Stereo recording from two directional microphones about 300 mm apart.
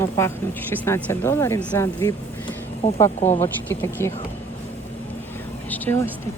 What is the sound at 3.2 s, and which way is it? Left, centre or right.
Speech, left.